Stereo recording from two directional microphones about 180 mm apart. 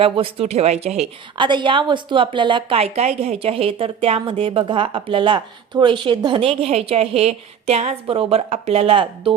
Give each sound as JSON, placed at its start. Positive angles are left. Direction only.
{"t": 0.0, "sound": "a woman's voice", "side_deg": -30}